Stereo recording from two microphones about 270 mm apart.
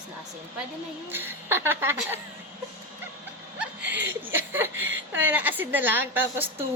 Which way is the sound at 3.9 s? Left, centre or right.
Centre.